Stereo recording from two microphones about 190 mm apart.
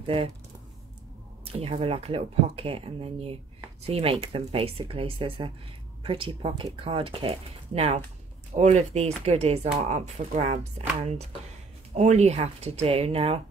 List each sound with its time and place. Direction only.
0.0 s speech: 30° right (ahead or behind)
1.5 s speech: 30° right (ahead or behind)
11.9 s speech: 35° right (ahead or behind)